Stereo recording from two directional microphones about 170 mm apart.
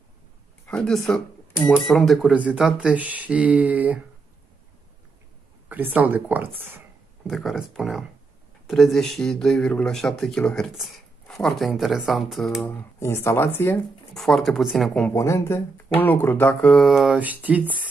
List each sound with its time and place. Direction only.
0.7 s speech: 5° left (ahead or behind)
5.7 s speech: 10° right (ahead or behind)
13.0 s speech: 15° left (ahead or behind)
14.1 s speech: centre (ahead or behind)
15.1 s speech: 20° left (ahead or behind); by 17.7 s 10° right (ahead or behind)